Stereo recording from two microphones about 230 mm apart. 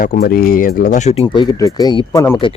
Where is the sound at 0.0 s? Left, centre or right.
Left; by 2.4 s centre.